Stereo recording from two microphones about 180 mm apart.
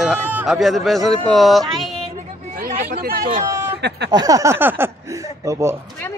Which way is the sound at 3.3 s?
15° right (ahead or behind).